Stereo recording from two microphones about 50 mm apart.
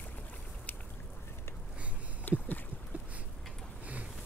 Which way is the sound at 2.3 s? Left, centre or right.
Left.